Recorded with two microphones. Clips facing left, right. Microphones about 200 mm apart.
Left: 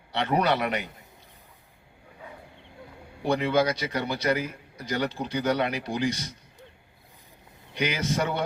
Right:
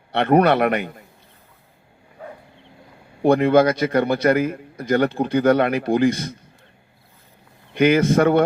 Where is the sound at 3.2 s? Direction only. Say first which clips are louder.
Right 9 dB; 55° right (ahead or behind).